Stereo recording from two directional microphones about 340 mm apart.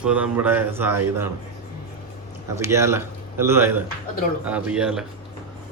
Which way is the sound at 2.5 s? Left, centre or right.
Centre.